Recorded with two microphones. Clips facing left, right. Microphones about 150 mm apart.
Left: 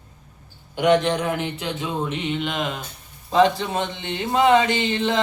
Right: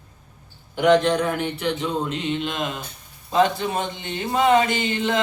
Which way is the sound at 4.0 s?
25° left (ahead or behind).